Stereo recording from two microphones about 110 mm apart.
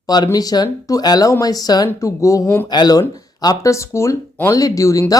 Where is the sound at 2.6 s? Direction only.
40° left (ahead or behind).